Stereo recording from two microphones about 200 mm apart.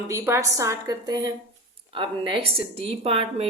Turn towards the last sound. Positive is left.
turn(degrees=-30)  # may be behind; listen again after turning